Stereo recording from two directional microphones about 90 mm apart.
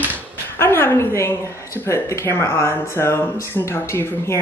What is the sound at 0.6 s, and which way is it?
A woman's voice, 25° left (ahead or behind).